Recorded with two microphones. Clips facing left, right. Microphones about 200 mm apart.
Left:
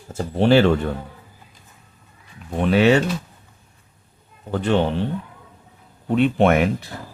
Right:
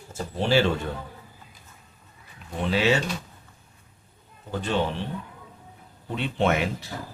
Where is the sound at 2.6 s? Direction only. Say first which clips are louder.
Left 7 dB; 60° left (ahead or behind).